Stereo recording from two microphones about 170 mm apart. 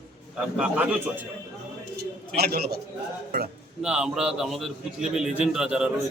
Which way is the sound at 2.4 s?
70° right (ahead or behind).